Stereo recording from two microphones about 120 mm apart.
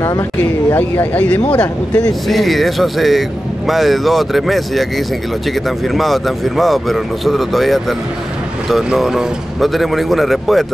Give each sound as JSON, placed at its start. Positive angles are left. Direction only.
{"t": 0.7, "sound": "speech", "side_deg": 15}
{"t": 2.2, "sound": "speech", "side_deg": 0}